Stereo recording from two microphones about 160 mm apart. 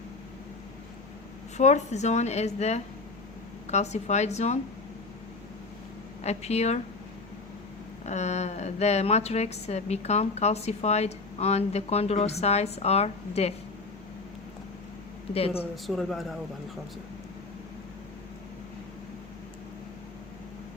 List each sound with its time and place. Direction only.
1.5 s a woman's voice: 45° left (ahead or behind)
6.2 s a woman's voice: 40° left (ahead or behind)
8.0 s a woman's voice: 45° left (ahead or behind)
15.3 s a woman's voice: 40° left (ahead or behind)
15.7 s speech: centre (ahead or behind)